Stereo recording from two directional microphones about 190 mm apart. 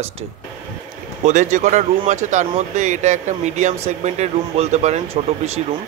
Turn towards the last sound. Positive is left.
turn(degrees=-35)  # may be behind; listen again after turning